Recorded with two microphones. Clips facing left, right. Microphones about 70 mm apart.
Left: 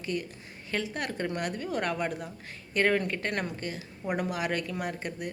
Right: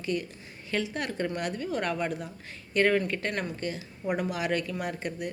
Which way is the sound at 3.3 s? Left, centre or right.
Left.